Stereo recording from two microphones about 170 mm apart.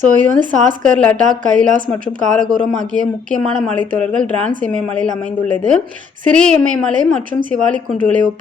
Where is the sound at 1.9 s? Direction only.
50° right (ahead or behind).